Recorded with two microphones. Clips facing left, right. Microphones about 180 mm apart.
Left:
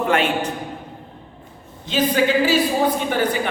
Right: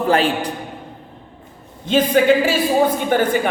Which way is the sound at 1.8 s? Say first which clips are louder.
Right 5 dB; 50° right (ahead or behind).